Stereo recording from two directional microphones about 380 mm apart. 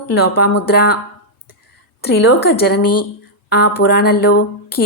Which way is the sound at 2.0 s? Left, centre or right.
Left.